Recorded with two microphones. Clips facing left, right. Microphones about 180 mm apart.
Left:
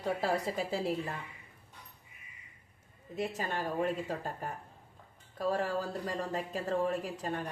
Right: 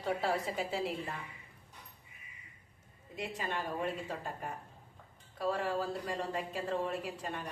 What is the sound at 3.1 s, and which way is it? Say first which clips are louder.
A woman's voice: left 3 dB; 40° left (ahead or behind).